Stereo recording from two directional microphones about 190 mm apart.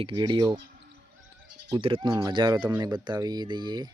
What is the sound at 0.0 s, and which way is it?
Speech, 25° right (ahead or behind).